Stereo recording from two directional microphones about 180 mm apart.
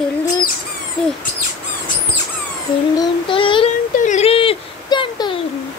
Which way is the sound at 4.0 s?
40° left (ahead or behind).